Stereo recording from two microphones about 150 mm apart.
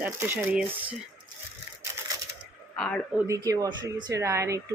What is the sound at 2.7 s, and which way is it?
Speech, 5° left (ahead or behind).